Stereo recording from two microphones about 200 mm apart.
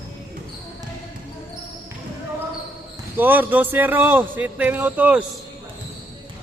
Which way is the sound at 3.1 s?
10° right (ahead or behind).